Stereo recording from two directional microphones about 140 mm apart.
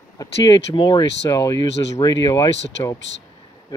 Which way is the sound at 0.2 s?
30° left (ahead or behind).